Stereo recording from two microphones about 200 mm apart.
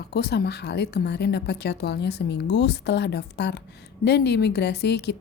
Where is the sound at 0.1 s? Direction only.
55° left (ahead or behind).